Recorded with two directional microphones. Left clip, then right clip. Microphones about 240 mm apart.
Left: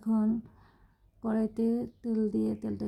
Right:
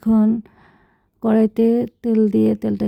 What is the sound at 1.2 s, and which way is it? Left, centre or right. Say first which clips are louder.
Speech: right 15 dB; right.